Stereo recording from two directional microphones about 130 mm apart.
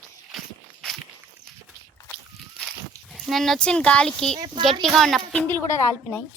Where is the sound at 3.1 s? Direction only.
Centre (ahead or behind).